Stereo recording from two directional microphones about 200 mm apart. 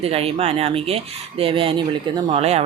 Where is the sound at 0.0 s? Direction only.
30° right (ahead or behind).